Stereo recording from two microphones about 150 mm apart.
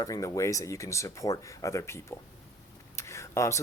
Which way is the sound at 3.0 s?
20° left (ahead or behind).